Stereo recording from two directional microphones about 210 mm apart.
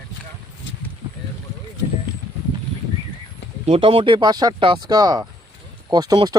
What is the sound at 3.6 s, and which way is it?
Speech, 25° right (ahead or behind).